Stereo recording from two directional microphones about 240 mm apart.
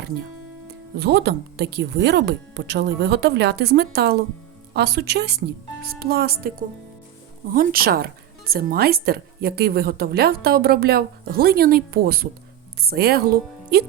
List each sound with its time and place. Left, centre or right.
0.9 s speech: right